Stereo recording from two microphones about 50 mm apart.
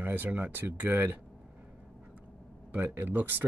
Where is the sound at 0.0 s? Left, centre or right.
Right.